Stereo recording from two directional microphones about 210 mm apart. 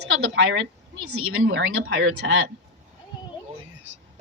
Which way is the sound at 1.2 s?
70° right (ahead or behind).